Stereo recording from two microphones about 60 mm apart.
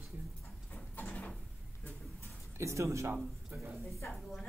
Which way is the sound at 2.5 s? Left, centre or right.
Right.